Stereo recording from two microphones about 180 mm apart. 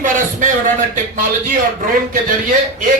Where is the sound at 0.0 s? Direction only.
45° right (ahead or behind).